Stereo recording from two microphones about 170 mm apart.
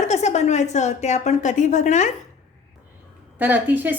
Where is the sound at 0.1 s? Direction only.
40° left (ahead or behind).